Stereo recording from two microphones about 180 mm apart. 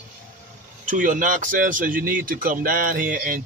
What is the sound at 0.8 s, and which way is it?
Speech, 45° right (ahead or behind).